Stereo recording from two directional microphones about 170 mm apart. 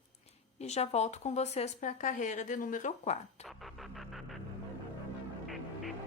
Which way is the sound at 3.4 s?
Centre (ahead or behind).